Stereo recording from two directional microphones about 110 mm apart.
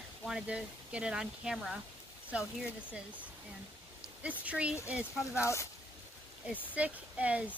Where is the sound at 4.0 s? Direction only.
10° right (ahead or behind).